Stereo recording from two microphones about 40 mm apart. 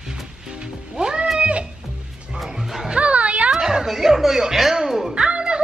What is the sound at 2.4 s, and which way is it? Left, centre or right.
Speech, centre.